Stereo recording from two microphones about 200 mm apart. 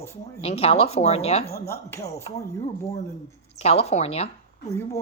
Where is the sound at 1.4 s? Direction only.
50° left (ahead or behind).